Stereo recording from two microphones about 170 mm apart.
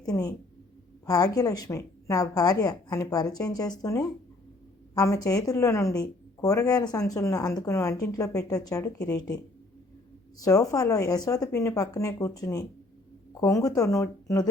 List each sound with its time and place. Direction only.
0.0 s a woman's voice: 20° left (ahead or behind)